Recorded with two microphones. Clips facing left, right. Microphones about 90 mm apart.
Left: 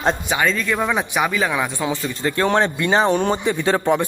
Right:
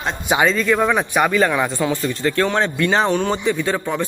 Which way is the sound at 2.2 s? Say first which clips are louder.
Left 1 dB; 20° left (ahead or behind).